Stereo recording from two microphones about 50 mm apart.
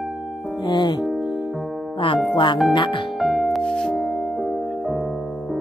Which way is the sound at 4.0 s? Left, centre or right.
Centre.